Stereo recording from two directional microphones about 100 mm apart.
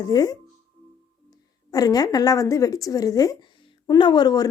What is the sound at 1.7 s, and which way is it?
Speech, 40° left (ahead or behind).